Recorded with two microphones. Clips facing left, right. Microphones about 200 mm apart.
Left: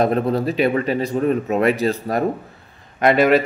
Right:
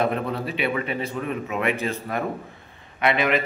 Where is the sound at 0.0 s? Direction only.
40° left (ahead or behind).